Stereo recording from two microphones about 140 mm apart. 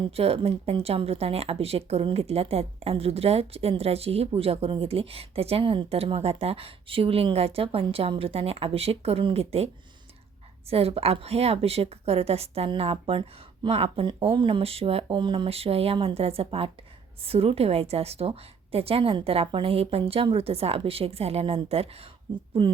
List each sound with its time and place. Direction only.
0.0 s speech: 40° right (ahead or behind)
10.7 s speech: 45° right (ahead or behind)